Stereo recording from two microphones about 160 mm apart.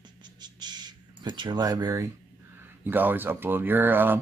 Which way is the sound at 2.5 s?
15° right (ahead or behind).